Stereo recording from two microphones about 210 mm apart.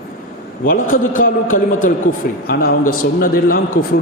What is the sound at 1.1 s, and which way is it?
A man's voice, 40° left (ahead or behind).